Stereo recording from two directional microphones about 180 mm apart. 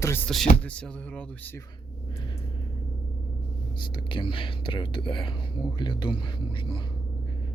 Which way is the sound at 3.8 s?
30° left (ahead or behind).